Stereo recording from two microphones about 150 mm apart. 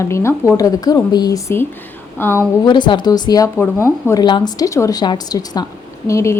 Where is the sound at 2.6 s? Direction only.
30° left (ahead or behind).